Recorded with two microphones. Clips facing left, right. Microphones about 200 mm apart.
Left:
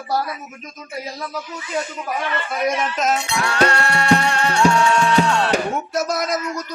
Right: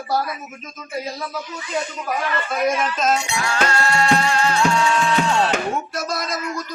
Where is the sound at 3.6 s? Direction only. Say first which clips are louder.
Even; 60° left (ahead or behind).